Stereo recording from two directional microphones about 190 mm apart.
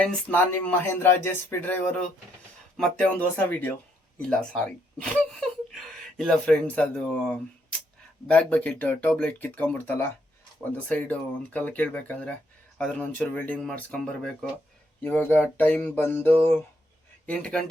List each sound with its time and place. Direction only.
0.0 s speech: 10° left (ahead or behind)